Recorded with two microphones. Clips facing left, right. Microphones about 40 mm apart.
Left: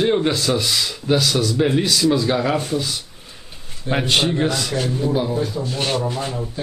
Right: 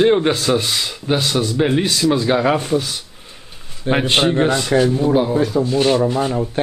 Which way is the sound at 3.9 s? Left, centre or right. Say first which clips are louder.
Right 3 dB; right.